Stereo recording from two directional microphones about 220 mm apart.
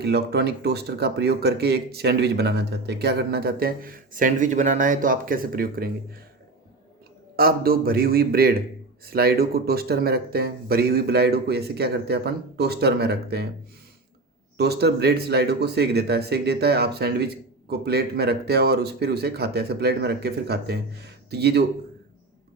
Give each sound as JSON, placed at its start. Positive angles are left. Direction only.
{"t": 0.0, "sound": "speech", "side_deg": -50}
{"t": 7.3, "sound": "speech", "side_deg": -45}
{"t": 14.6, "sound": "speech", "side_deg": -45}